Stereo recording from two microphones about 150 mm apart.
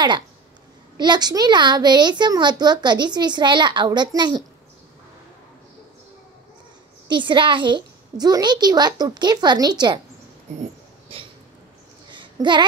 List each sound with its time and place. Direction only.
0.9 s a child's voice: 30° right (ahead or behind)
7.1 s a child's voice: 30° right (ahead or behind)
12.1 s a sound: 30° right (ahead or behind)